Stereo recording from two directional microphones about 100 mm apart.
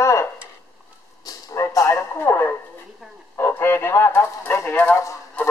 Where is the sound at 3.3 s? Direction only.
25° left (ahead or behind).